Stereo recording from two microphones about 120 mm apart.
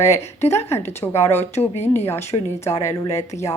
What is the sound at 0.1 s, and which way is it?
Speech, 20° left (ahead or behind).